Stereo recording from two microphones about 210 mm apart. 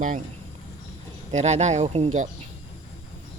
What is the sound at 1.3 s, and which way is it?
Speech, 30° right (ahead or behind).